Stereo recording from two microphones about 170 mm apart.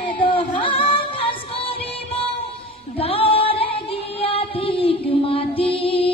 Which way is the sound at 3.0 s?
35° left (ahead or behind).